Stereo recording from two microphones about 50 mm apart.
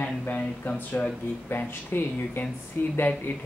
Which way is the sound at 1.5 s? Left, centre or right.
Left.